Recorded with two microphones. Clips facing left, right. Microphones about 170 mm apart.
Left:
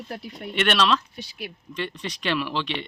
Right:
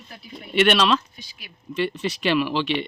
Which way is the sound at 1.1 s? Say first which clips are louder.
Left 10 dB; 70° left (ahead or behind).